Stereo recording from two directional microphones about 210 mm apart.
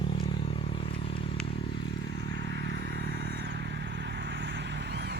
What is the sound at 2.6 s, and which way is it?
Vehicle, 50° right (ahead or behind).